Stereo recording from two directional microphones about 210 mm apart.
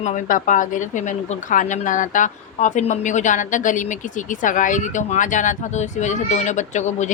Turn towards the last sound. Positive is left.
turn(degrees=35)  # may be behind; listen again after turning